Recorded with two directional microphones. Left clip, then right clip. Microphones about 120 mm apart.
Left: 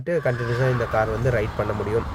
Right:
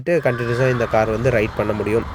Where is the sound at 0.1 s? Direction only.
25° right (ahead or behind).